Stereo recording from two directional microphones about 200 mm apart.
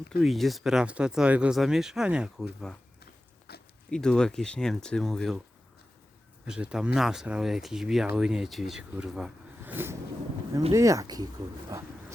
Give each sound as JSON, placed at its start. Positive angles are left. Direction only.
{"t": 0.2, "sound": "speech", "side_deg": 0}
{"t": 3.5, "sound": "a sound", "side_deg": 55}
{"t": 3.8, "sound": "speech", "side_deg": 5}
{"t": 6.4, "sound": "speech", "side_deg": -5}